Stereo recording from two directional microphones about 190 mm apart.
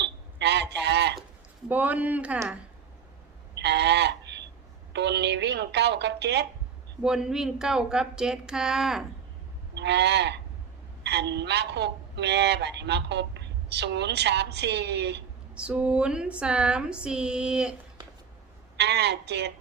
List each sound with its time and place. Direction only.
0.0 s a sound: 65° right (ahead or behind)
1.7 s speech: 10° right (ahead or behind)
3.5 s a sound: 65° right (ahead or behind)
4.9 s a woman's voice: 65° right (ahead or behind)
7.0 s speech: 5° right (ahead or behind)
9.7 s a woman's voice: 65° right (ahead or behind)
15.5 s speech: 5° right (ahead or behind)
18.8 s a woman's voice: 60° right (ahead or behind)